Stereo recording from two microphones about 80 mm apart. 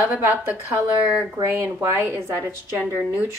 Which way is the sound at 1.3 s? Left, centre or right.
Right.